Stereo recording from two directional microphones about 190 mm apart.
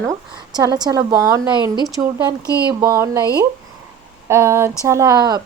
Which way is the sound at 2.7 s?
15° right (ahead or behind).